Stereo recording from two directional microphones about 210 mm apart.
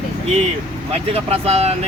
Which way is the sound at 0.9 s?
30° right (ahead or behind).